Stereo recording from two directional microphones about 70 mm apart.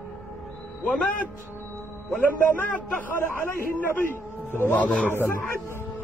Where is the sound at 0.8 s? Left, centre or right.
Centre.